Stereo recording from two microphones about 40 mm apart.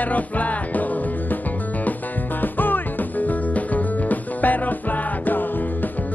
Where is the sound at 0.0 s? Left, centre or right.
Left.